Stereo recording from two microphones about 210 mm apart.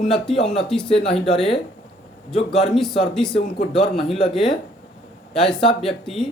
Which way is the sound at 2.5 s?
Centre (ahead or behind).